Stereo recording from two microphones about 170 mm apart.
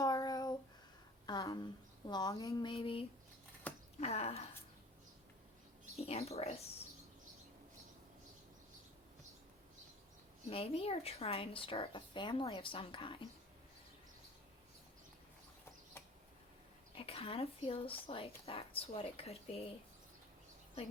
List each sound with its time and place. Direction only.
0.0 s a sound: 20° left (ahead or behind)
3.7 s a sound: 10° left (ahead or behind)
4.0 s speech: 35° left (ahead or behind)
6.0 s speech: 35° left (ahead or behind)
10.5 s speech: 35° left (ahead or behind)
16.9 s speech: 35° left (ahead or behind)